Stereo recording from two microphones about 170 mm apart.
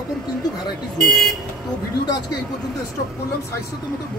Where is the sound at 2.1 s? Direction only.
20° left (ahead or behind).